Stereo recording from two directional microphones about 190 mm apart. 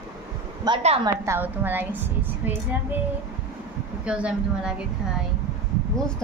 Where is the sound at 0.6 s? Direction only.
30° right (ahead or behind).